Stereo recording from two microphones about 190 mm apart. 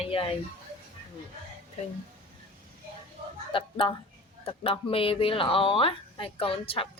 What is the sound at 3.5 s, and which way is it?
A woman's voice, 25° left (ahead or behind).